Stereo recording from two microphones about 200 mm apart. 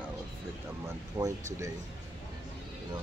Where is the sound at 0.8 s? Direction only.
15° right (ahead or behind).